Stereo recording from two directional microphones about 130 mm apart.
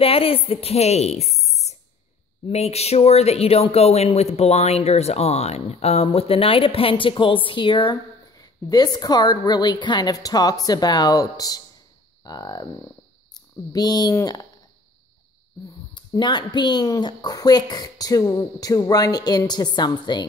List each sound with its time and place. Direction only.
0.0 s a woman's voice: 45° left (ahead or behind); by 14.4 s 30° left (ahead or behind)
15.9 s speech: 35° left (ahead or behind)